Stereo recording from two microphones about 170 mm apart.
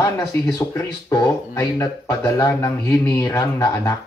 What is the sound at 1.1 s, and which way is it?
Speech, 20° left (ahead or behind).